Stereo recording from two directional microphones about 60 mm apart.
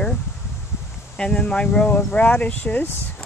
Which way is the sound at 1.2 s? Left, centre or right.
Centre.